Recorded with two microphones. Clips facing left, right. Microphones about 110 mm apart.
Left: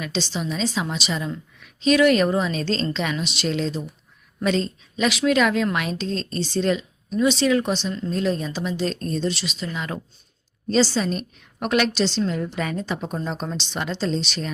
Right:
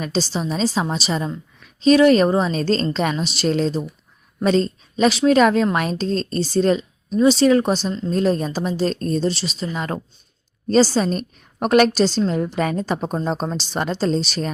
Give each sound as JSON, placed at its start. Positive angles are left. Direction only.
{"t": 0.0, "sound": "a woman's voice", "side_deg": -40}